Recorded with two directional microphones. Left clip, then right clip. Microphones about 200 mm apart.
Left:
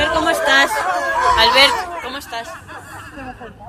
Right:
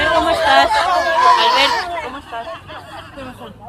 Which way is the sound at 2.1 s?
35° left (ahead or behind).